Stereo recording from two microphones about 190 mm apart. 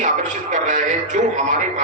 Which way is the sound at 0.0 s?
40° right (ahead or behind).